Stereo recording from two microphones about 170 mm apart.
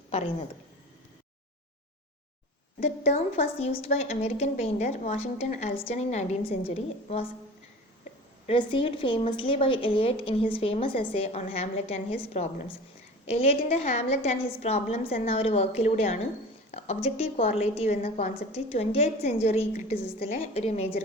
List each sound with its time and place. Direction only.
0.1 s a woman's voice: 40° left (ahead or behind)
2.8 s a woman's voice: 40° left (ahead or behind)
8.4 s a woman's voice: 30° left (ahead or behind)